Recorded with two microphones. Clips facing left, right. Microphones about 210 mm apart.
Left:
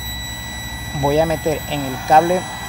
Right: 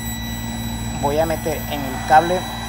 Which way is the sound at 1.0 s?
15° left (ahead or behind).